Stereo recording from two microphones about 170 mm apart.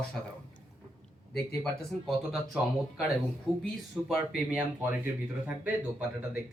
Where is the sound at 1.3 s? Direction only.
Centre (ahead or behind).